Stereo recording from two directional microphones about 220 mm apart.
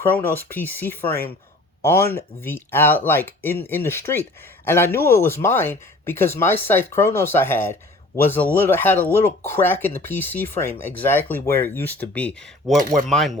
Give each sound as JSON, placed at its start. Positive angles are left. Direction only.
{"t": 0.0, "sound": "speech", "side_deg": 10}